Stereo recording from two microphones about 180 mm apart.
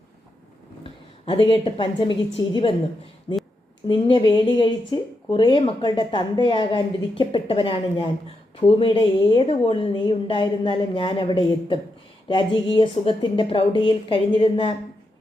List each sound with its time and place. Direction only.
0.9 s a woman's voice: 30° left (ahead or behind)